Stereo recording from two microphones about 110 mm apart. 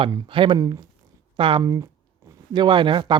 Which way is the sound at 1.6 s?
30° right (ahead or behind).